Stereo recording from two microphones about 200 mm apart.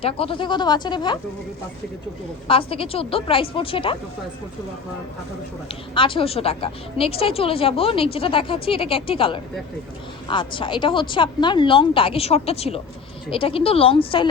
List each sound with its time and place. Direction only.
0.0 s a woman's voice: 25° left (ahead or behind)
2.5 s a woman's voice: 25° left (ahead or behind)
5.9 s a woman's voice: 25° left (ahead or behind)